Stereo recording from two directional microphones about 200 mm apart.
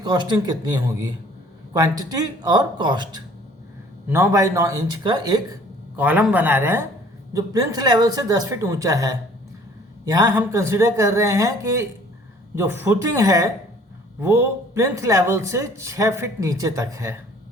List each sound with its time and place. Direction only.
0.0 s speech: 20° right (ahead or behind)
4.1 s speech: 15° right (ahead or behind)
6.0 s speech: 10° right (ahead or behind)